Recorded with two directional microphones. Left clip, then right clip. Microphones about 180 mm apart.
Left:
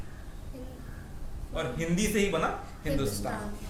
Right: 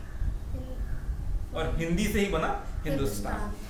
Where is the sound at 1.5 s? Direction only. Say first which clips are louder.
Right 1 dB; 15° left (ahead or behind).